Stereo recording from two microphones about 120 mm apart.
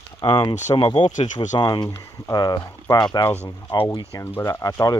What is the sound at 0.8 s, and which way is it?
Speech, 45° left (ahead or behind).